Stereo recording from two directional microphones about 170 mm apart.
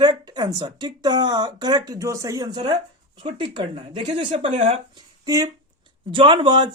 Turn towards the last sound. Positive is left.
turn(degrees=-30)  # may be behind; listen again after turning